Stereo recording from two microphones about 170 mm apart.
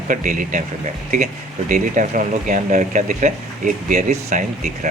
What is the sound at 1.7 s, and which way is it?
Speech, 50° right (ahead or behind).